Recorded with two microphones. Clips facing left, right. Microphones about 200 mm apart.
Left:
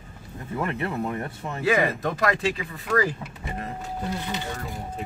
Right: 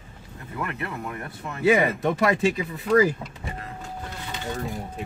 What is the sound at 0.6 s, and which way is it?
Speech, 30° left (ahead or behind).